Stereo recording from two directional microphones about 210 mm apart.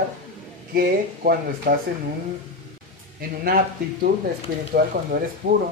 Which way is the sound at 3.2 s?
45° right (ahead or behind).